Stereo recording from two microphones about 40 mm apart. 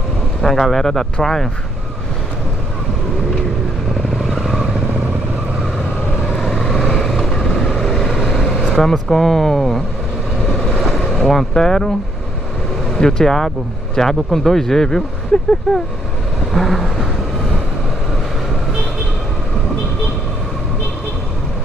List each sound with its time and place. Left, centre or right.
0.4 s speech: centre
6.5 s vehicle: centre
8.5 s vehicle: centre
9.1 s speech: centre
10.8 s vehicle: centre
11.5 s speech: centre
12.9 s speech: centre
16.5 s vehicle: centre